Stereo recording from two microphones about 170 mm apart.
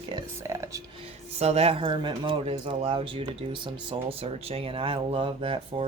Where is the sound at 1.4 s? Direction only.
40° right (ahead or behind).